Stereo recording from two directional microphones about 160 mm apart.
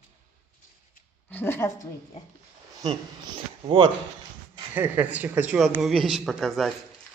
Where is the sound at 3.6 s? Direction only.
30° right (ahead or behind).